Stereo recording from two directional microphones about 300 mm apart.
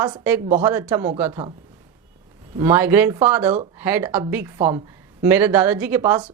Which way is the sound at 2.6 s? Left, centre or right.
Centre.